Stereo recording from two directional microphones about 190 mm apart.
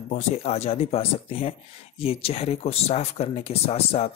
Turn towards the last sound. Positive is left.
turn(degrees=30)  # may be behind; listen again after turning